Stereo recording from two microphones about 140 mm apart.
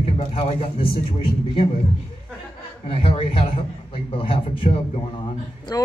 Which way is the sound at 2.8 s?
40° left (ahead or behind).